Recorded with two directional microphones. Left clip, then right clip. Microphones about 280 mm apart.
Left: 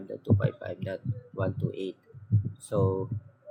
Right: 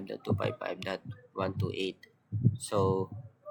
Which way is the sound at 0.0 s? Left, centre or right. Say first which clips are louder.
Left 2 dB; centre.